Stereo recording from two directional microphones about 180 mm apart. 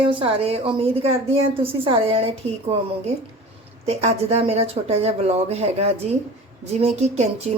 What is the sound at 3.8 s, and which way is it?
Speech, 35° right (ahead or behind).